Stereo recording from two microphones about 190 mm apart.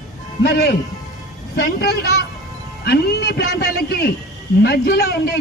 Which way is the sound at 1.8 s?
55° left (ahead or behind).